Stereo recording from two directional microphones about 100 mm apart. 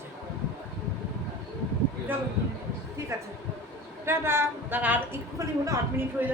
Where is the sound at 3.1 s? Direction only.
30° right (ahead or behind).